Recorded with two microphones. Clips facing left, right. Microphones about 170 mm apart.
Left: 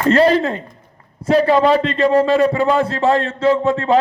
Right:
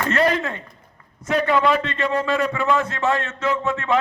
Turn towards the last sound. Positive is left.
turn(degrees=30)  # may be behind; listen again after turning